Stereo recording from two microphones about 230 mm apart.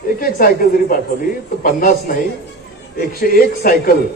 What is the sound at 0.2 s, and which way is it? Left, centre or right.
Speech, left.